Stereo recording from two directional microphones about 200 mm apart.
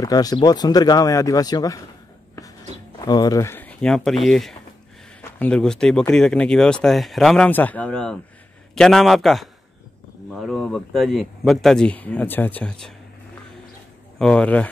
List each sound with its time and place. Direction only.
0.0 s speech: 20° left (ahead or behind)
3.1 s speech: 20° left (ahead or behind)
14.1 s speech: 5° left (ahead or behind)